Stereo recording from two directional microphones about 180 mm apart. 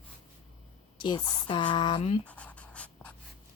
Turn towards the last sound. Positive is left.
turn(degrees=5)  # may be behind; listen again after turning